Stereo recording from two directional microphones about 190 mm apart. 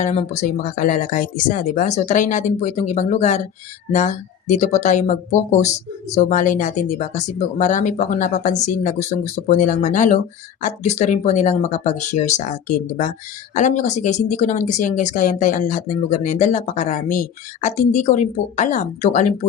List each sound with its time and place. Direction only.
0.0 s speech: 35° left (ahead or behind)